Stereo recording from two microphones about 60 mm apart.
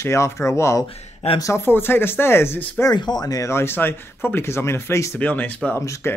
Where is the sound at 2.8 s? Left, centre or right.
Left.